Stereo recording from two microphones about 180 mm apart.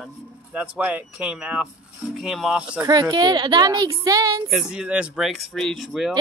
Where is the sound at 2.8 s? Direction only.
20° right (ahead or behind).